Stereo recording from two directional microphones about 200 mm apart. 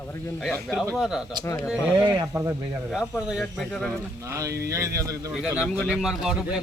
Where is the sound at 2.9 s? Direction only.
Centre (ahead or behind).